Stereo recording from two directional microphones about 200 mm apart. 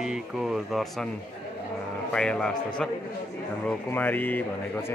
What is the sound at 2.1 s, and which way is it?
Speech, 5° left (ahead or behind).